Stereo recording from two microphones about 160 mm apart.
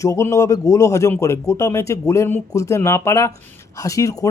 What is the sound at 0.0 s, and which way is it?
Speech, 20° left (ahead or behind).